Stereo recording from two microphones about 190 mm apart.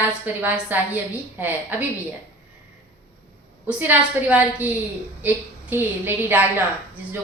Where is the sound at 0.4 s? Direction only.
10° right (ahead or behind).